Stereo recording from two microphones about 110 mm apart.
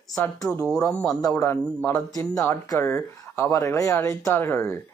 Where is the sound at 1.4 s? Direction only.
25° left (ahead or behind).